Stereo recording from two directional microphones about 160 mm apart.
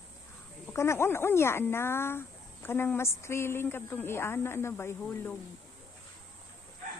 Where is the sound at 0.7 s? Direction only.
15° left (ahead or behind).